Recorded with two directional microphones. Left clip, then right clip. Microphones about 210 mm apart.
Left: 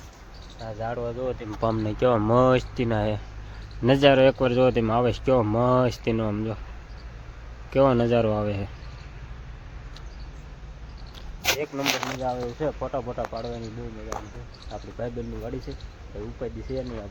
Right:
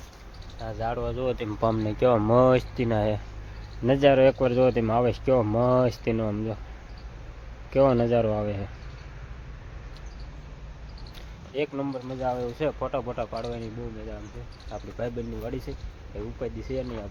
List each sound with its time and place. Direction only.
0.6 s speech: 10° right (ahead or behind)
1.2 s speech: 50° right (ahead or behind)
1.6 s speech: centre (ahead or behind)
3.8 s speech: 15° left (ahead or behind)
7.7 s speech: 10° left (ahead or behind)
11.7 s speech: 5° right (ahead or behind)
14.7 s speech: centre (ahead or behind)